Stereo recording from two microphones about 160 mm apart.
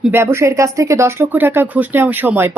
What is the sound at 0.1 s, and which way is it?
Speech, 15° right (ahead or behind).